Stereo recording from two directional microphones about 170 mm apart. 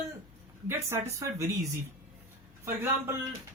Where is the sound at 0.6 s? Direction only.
15° right (ahead or behind).